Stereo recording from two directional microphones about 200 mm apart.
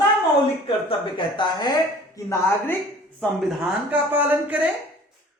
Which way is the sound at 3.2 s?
Centre (ahead or behind).